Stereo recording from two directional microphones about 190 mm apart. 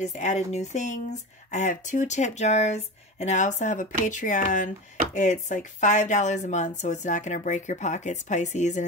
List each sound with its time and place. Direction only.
0.0 s speech: 40° left (ahead or behind)